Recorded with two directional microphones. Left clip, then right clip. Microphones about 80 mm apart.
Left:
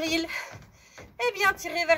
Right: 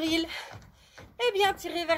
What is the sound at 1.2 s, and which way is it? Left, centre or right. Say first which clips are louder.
Speech: left 1 dB; right.